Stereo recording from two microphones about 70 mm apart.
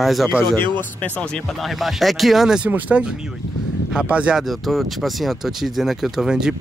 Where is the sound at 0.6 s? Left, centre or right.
Left.